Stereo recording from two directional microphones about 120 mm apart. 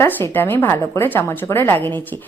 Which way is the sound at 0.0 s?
20° left (ahead or behind).